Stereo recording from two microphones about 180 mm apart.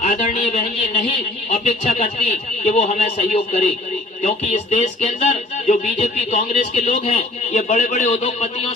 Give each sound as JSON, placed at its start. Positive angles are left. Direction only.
{"t": 0.0, "sound": "speech", "side_deg": 40}